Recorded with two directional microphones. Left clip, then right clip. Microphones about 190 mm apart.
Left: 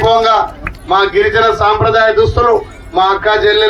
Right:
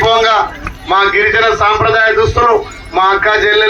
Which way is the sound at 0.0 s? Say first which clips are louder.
Even; 15° left (ahead or behind).